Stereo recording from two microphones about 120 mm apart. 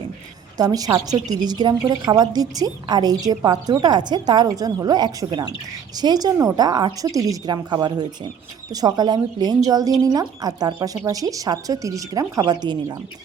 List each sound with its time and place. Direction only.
0.5 s a woman's voice: 30° right (ahead or behind)